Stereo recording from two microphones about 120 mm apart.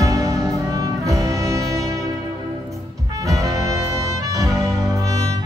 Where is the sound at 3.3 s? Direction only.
30° right (ahead or behind).